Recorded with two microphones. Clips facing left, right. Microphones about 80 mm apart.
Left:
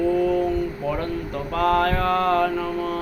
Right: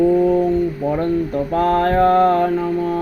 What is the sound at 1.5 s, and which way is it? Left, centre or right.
Mantra, right.